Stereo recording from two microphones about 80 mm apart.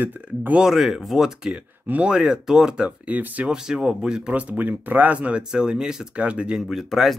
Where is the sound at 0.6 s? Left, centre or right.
Centre; by 3.5 s right.